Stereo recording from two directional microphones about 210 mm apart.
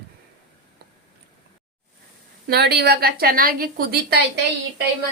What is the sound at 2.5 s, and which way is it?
A woman's voice, 50° right (ahead or behind).